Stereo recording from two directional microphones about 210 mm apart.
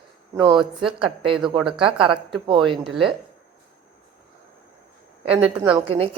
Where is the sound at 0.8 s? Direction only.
25° right (ahead or behind).